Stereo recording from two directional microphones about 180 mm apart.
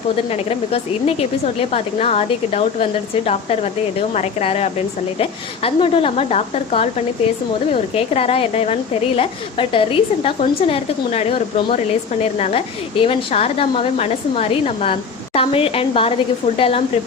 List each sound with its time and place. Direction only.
0.3 s a woman's voice: 35° left (ahead or behind)